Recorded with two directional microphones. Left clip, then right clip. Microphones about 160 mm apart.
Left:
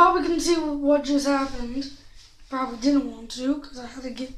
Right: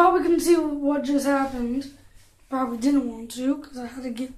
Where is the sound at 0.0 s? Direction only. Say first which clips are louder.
Even; 30° right (ahead or behind).